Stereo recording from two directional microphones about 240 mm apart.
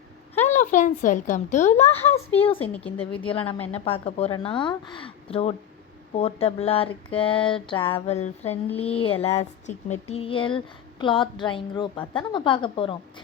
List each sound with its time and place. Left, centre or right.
0.3 s speech: left
2.6 s speech: centre
3.1 s speech: left